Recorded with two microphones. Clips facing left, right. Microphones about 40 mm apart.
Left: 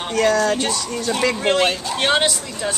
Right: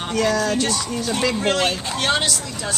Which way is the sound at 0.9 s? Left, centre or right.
Centre.